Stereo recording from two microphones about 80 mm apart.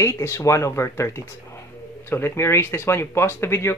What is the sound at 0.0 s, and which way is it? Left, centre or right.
Speech, left.